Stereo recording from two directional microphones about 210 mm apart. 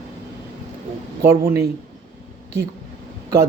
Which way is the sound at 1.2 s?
10° right (ahead or behind).